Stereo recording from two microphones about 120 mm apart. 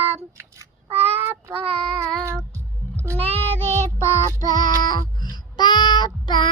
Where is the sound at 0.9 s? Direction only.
55° right (ahead or behind).